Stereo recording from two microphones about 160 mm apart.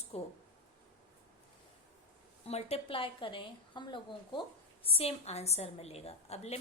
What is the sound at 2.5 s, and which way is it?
A woman's voice, 40° left (ahead or behind).